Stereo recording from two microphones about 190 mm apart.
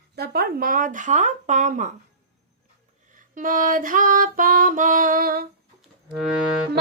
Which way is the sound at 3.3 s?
45° right (ahead or behind).